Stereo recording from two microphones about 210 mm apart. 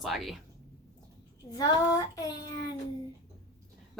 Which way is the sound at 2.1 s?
15° left (ahead or behind).